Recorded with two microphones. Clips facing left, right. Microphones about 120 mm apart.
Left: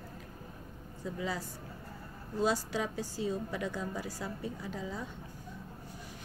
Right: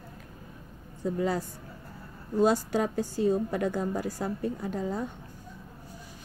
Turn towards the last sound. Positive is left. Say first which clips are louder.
# right 8 dB
turn(degrees=-50)  # may be behind; listen again after turning